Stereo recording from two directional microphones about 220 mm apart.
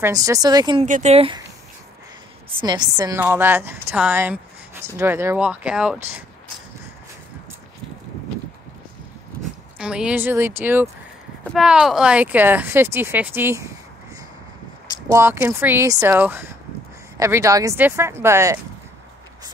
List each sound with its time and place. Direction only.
0.0 s a woman's voice: 15° right (ahead or behind)
0.8 s speech: 35° right (ahead or behind)
2.6 s a woman's voice: 20° right (ahead or behind)
9.8 s a woman's voice: 5° right (ahead or behind)
15.0 s a woman's voice: 10° right (ahead or behind)